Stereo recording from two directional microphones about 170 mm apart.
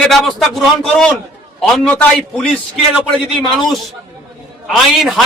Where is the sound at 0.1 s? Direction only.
Centre (ahead or behind).